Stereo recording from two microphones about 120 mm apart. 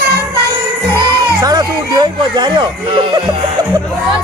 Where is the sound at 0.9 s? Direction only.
35° right (ahead or behind).